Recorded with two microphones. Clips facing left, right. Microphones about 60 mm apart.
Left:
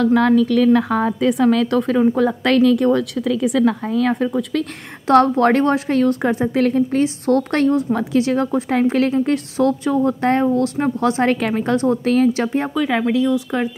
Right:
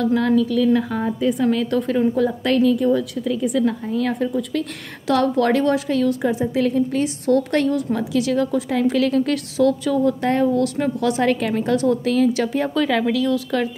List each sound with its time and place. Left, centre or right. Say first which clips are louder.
0.0 s a woman's voice: left 4 dB; left
1.2 s a woman's voice: left 2 dB; left
1.8 s a woman's voice: left 3 dB; left
5.0 s a woman's voice: left 5 dB; left
9.1 s a woman's voice: left 2 dB; left
12.6 s speech: even; centre